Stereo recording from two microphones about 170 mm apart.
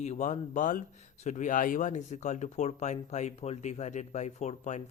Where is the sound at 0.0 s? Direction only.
45° left (ahead or behind).